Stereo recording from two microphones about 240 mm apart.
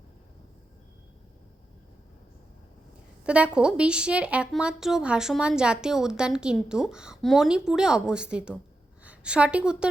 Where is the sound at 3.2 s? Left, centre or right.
Centre.